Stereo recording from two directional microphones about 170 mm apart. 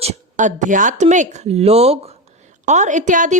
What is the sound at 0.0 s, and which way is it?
A woman's voice, 45° right (ahead or behind).